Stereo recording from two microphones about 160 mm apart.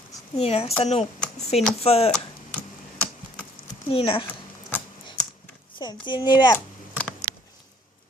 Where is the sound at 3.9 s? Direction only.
35° left (ahead or behind).